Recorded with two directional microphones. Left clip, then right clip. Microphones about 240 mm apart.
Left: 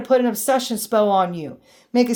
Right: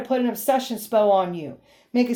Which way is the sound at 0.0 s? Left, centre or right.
Left.